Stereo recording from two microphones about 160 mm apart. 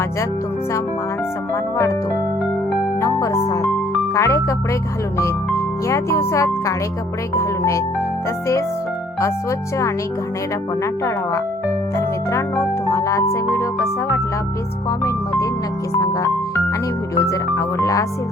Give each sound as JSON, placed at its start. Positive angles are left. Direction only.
{"t": 3.0, "sound": "speech", "side_deg": 20}
{"t": 9.2, "sound": "speech", "side_deg": 20}
{"t": 11.9, "sound": "music", "side_deg": 15}
{"t": 14.8, "sound": "speech", "side_deg": 20}